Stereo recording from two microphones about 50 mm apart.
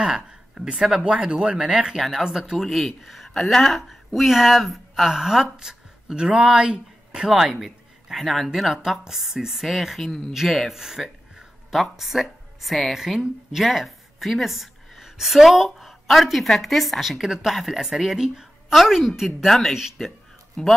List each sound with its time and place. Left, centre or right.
0.0 s speech: centre
2.0 s a woman's voice: centre
7.6 s a sound: centre
8.7 s a woman's voice: centre
19.4 s speech: centre
19.7 s a woman's voice: centre
20.6 s speech: centre